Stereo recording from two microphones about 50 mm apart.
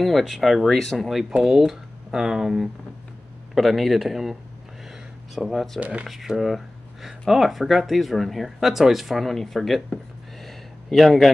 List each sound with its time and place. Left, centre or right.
0.0 s speech: centre
1.3 s speech: centre
5.8 s speech: right
6.0 s speech: centre
10.4 s a sound: centre